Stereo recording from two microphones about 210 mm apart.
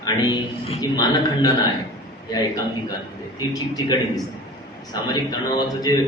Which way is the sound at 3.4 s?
20° left (ahead or behind).